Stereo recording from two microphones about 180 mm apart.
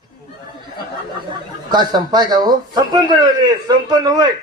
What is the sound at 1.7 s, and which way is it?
A man's voice, 25° right (ahead or behind).